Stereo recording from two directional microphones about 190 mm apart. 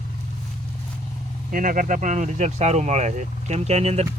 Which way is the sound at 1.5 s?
45° right (ahead or behind).